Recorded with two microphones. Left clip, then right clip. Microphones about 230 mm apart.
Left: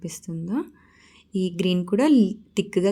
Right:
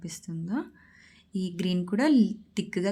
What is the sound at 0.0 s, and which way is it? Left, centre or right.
Speech, centre.